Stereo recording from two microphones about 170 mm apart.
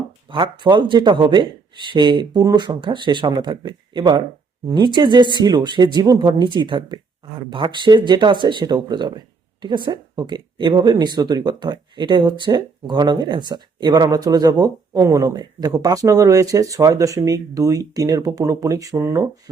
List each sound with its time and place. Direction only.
0.3 s speech: 30° right (ahead or behind)